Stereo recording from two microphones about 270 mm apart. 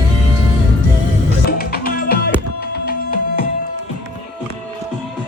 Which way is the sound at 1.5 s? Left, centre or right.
Left.